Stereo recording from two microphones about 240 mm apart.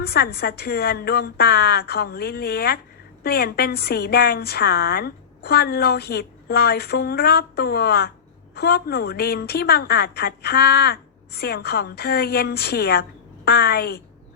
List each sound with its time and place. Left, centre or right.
0.0 s a woman's voice: left